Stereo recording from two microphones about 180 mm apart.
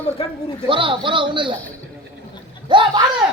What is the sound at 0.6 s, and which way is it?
Speech, 30° right (ahead or behind).